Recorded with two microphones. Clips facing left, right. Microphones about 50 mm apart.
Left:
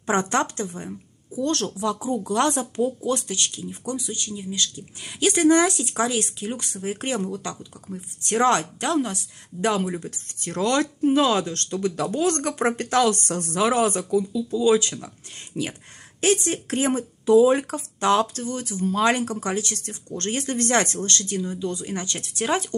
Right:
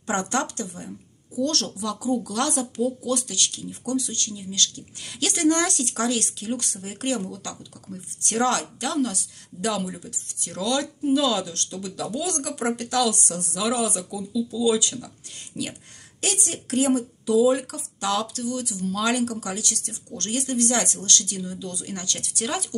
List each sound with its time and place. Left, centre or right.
0.0 s speech: left
16.2 s speech: left